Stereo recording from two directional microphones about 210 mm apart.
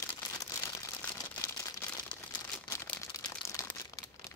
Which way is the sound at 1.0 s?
10° left (ahead or behind).